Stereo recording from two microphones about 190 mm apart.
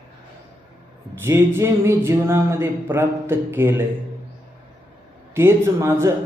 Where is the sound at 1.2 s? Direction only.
15° right (ahead or behind).